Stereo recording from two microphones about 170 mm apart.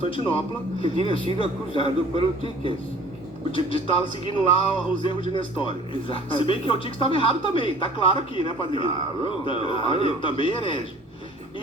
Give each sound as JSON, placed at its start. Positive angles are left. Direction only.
{"t": 0.0, "sound": "a man's voice", "side_deg": 30}
{"t": 4.3, "sound": "a man's voice", "side_deg": 30}